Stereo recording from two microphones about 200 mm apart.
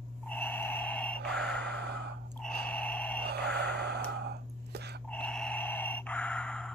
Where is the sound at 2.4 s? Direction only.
5° left (ahead or behind).